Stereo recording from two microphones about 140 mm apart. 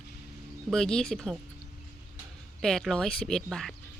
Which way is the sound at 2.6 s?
5° left (ahead or behind).